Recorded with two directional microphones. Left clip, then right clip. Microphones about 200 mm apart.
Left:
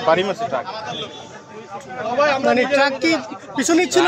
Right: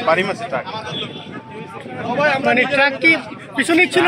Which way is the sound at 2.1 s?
50° right (ahead or behind).